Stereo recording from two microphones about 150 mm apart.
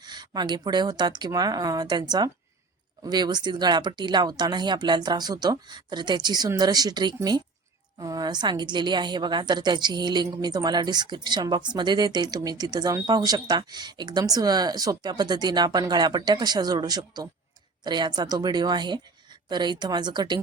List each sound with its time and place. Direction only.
0.0 s a woman's voice: 30° right (ahead or behind)